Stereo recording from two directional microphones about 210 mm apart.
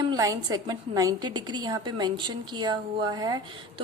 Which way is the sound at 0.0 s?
15° right (ahead or behind).